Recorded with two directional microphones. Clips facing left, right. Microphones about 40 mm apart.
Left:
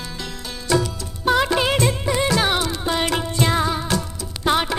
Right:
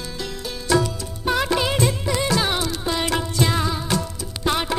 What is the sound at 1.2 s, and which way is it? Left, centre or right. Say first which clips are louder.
Music: left 3 dB; centre.